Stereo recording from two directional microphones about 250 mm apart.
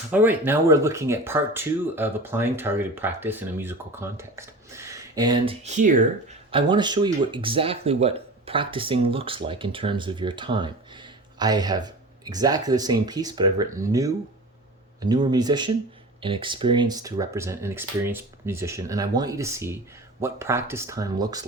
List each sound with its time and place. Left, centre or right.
0.1 s speech: centre
5.6 s speech: right
15.0 s speech: centre